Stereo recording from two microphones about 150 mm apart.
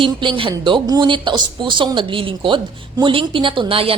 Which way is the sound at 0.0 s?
35° right (ahead or behind).